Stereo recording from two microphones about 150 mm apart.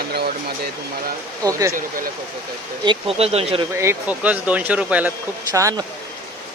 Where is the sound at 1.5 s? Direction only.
20° right (ahead or behind).